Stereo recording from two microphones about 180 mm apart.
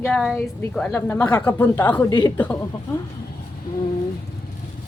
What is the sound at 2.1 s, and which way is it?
Speech, 25° left (ahead or behind).